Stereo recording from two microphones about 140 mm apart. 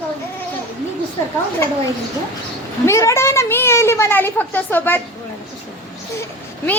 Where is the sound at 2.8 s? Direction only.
20° left (ahead or behind).